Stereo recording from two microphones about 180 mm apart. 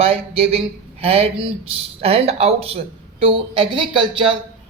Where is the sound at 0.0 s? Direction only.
30° right (ahead or behind).